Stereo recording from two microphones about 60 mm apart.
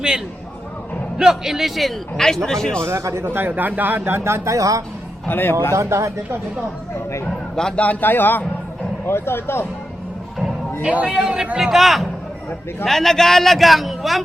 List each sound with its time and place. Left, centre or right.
1.2 s a man's voice: centre
2.1 s a man's voice: centre
2.8 s a man's voice: right
3.4 s speech: right
4.2 s speech: right
5.3 s a man's voice: left
5.7 s speech: right
7.8 s a man's voice: left
10.8 s a man's voice: centre